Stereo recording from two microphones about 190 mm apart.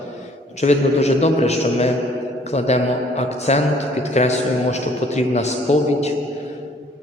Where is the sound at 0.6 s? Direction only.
35° left (ahead or behind).